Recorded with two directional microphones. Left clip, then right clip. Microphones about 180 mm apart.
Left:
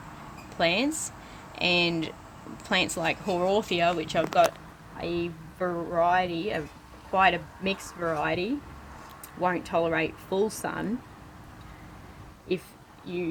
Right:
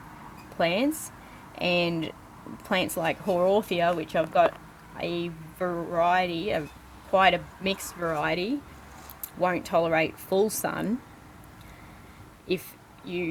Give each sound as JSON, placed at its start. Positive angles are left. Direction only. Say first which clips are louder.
{"t": 0.5, "sound": "speech", "louder": "even", "side_deg": -45}